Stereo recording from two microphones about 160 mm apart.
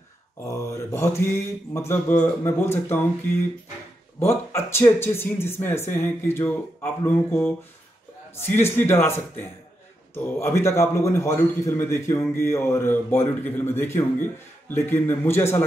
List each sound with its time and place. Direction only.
0.4 s a man's voice: 20° left (ahead or behind)
4.2 s a man's voice: 15° left (ahead or behind)